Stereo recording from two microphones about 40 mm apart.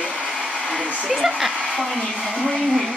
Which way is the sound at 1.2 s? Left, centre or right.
Centre.